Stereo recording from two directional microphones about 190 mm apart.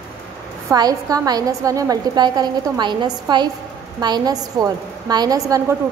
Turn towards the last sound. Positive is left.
turn(degrees=-20)  # may be behind; listen again after turning